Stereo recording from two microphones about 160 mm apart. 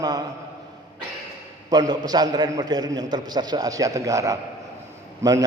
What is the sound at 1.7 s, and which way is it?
A man's voice, 25° right (ahead or behind).